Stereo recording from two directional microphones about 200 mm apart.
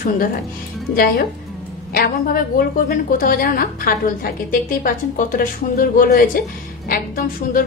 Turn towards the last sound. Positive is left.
turn(degrees=45)  # may be behind; listen again after turning